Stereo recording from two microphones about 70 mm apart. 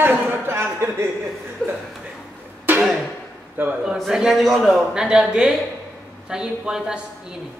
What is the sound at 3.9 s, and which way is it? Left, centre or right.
Speech, centre.